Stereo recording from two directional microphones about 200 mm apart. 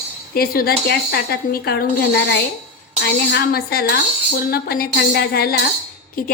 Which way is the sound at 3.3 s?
50° left (ahead or behind).